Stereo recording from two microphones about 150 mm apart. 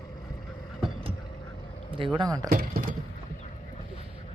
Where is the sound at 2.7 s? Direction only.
90° right.